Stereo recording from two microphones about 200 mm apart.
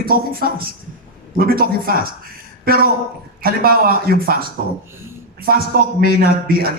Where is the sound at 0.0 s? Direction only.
50° right (ahead or behind).